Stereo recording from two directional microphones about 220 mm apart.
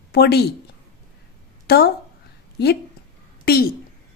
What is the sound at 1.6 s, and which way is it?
Speech, 45° left (ahead or behind).